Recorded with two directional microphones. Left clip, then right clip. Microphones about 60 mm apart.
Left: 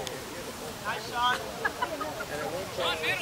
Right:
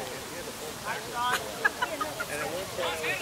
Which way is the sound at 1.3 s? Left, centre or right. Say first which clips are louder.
Right 2 dB; right.